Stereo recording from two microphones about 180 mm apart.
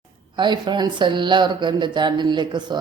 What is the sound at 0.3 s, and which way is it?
Speech, 25° right (ahead or behind).